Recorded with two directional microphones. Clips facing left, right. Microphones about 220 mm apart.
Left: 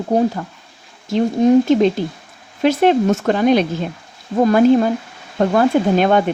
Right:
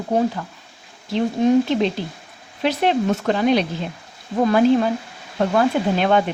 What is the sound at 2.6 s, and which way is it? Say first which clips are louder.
Speech: left 5 dB; 50° left (ahead or behind).